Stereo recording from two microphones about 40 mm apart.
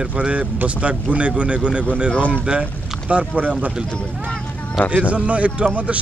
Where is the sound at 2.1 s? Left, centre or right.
Left.